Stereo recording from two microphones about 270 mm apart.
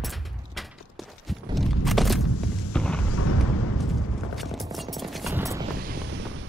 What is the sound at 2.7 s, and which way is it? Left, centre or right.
Boom, centre.